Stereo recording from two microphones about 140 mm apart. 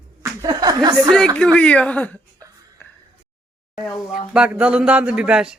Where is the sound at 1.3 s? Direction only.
10° left (ahead or behind).